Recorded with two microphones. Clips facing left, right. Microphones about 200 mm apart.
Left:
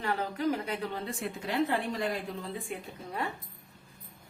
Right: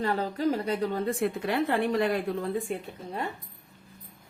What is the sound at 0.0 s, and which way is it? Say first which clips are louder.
A woman's voice: right 4 dB; 35° right (ahead or behind).